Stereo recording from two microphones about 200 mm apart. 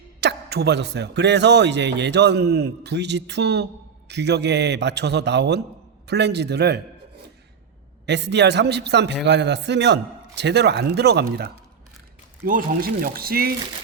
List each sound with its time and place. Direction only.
0.2 s a man's voice: 55° right (ahead or behind)
8.0 s a man's voice: 60° right (ahead or behind)